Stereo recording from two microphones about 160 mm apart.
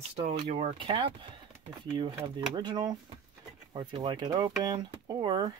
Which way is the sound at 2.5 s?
25° right (ahead or behind).